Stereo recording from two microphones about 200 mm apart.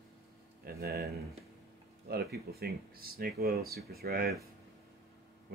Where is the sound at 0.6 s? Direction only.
50° right (ahead or behind).